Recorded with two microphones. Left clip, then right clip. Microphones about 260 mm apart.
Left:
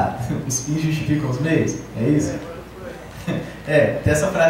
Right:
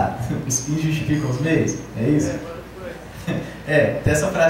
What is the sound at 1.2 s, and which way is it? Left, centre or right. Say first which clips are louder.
A man's voice: even; centre.